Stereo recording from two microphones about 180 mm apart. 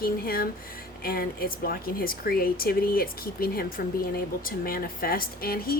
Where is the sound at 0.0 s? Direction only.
55° left (ahead or behind).